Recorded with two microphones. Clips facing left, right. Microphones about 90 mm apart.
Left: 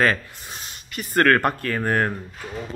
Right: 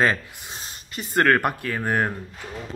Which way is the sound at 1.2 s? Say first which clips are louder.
Left 1 dB; 10° right (ahead or behind).